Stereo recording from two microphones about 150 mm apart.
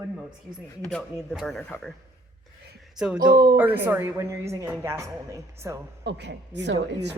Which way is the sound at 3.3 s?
80° right.